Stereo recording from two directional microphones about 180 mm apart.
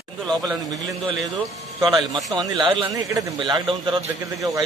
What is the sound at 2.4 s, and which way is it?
A man's voice, 25° right (ahead or behind).